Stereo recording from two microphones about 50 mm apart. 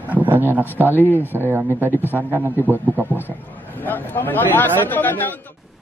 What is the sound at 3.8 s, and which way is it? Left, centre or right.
Speech, left.